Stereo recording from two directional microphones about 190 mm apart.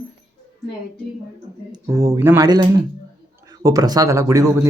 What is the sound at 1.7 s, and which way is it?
Speech, 15° right (ahead or behind).